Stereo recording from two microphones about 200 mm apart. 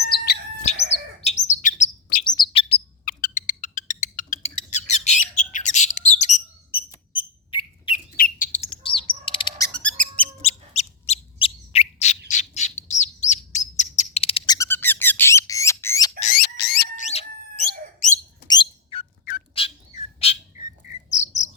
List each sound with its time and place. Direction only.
0.0 s chirp: 50° left (ahead or behind)
1.2 s bird: 35° left (ahead or behind)
2.2 s bird: 25° left (ahead or behind)
3.0 s a sound: 45° left (ahead or behind)
5.4 s bird: 40° left (ahead or behind)
7.9 s bird: 45° left (ahead or behind)
8.7 s bird: 25° left (ahead or behind)
9.6 s music: 5° left (ahead or behind)
10.4 s bird: 30° left (ahead or behind); by 16.1 s 15° left (ahead or behind)
16.2 s a sound: 50° left (ahead or behind)
17.0 s squeak: 35° left (ahead or behind)
18.4 s bird: 20° left (ahead or behind)
21.1 s chirp: 35° left (ahead or behind)